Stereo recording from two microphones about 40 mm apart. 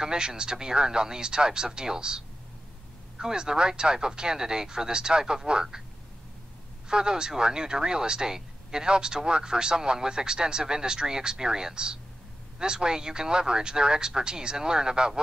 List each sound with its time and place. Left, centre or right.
0.0 s speech: centre
6.9 s speech: right